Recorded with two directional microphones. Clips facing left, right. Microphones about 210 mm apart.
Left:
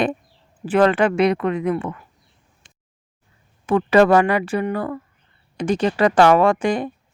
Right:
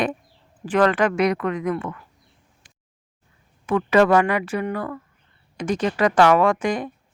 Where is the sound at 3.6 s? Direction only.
35° left (ahead or behind).